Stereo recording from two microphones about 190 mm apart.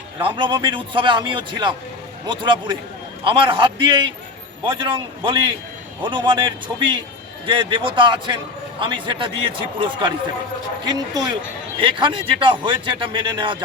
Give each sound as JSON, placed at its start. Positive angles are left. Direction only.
{"t": 0.2, "sound": "a man's voice", "side_deg": -25}